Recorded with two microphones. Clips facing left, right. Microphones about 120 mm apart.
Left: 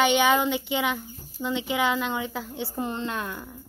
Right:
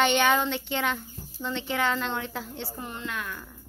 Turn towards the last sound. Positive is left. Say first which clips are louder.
# left 5 dB
turn(degrees=30)  # may be behind; listen again after turning